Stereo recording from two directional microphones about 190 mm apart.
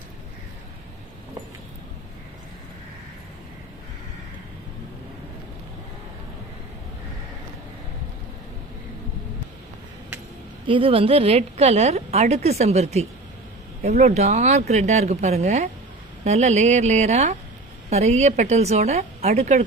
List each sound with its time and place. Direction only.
10.7 s a woman's voice: 30° right (ahead or behind)